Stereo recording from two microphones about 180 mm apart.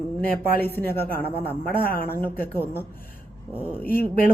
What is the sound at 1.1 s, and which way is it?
Speech, 55° left (ahead or behind).